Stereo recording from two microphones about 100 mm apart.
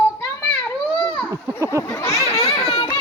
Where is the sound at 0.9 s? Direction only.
60° left (ahead or behind).